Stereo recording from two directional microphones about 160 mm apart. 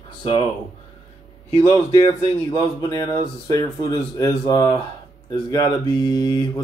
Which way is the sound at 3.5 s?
25° left (ahead or behind).